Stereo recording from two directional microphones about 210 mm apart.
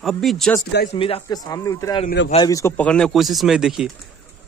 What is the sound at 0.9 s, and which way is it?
A man's voice, 25° left (ahead or behind).